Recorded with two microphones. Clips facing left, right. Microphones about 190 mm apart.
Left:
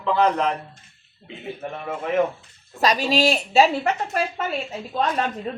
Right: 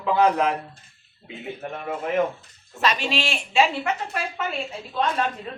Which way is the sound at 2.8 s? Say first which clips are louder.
Left 5 dB; 35° left (ahead or behind).